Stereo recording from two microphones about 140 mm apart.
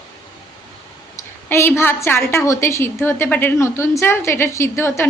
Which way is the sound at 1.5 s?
15° left (ahead or behind).